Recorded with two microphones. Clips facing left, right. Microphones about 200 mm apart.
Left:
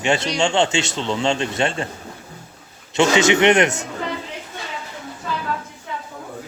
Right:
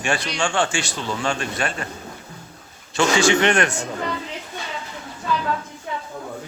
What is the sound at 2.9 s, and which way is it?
Speech, 20° left (ahead or behind).